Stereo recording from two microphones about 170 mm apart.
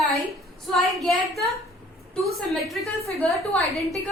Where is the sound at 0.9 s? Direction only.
Centre (ahead or behind).